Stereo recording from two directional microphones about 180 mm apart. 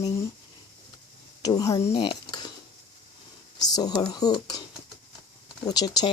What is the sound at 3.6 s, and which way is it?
Speech, 20° left (ahead or behind).